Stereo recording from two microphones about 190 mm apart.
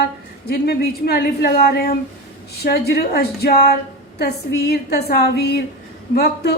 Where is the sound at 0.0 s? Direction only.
55° left (ahead or behind).